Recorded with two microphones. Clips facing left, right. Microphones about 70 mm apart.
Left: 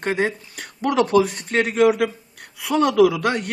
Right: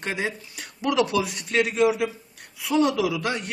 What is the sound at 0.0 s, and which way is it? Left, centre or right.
A man's voice, left.